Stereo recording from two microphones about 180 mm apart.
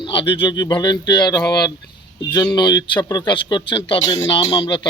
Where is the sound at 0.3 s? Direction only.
25° left (ahead or behind).